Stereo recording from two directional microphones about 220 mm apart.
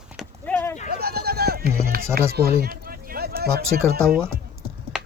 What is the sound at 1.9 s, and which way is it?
Music, 45° right (ahead or behind).